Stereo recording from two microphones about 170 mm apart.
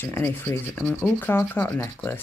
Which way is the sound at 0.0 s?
10° left (ahead or behind).